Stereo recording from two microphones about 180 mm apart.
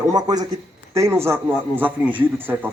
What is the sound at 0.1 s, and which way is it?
A man's voice, 20° right (ahead or behind).